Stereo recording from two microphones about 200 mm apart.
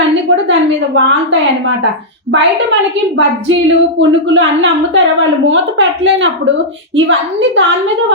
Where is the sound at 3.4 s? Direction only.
70° right (ahead or behind).